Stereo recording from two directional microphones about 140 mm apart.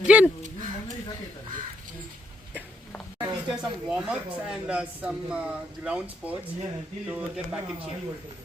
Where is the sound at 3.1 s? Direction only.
30° right (ahead or behind).